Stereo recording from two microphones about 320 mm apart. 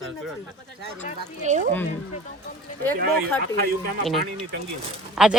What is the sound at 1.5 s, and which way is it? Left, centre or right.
Speech, right.